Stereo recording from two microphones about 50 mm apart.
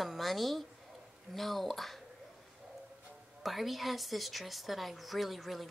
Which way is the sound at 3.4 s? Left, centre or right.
Centre.